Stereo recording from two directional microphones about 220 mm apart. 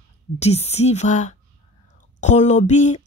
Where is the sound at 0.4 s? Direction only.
30° left (ahead or behind).